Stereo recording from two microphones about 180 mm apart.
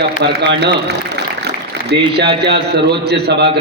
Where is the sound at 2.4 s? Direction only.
65° right (ahead or behind).